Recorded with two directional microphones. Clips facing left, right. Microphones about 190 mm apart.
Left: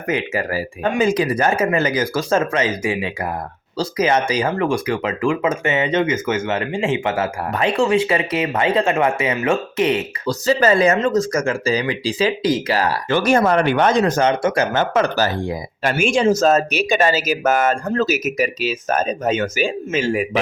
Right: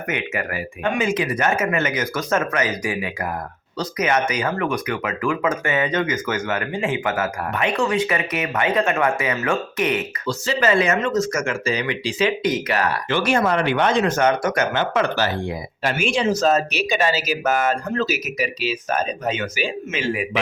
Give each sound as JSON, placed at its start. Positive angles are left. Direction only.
{"t": 0.1, "sound": "speech", "side_deg": 30}
{"t": 10.2, "sound": "speech", "side_deg": 40}